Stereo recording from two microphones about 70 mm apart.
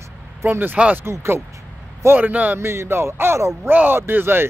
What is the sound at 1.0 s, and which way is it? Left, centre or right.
Speech, right.